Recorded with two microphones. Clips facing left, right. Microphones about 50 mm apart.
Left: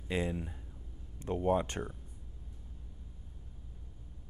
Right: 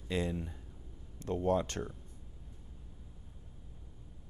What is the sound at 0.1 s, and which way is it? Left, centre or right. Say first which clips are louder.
Speech: even; centre.